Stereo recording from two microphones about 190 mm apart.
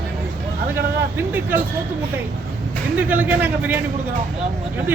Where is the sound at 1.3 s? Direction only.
10° right (ahead or behind).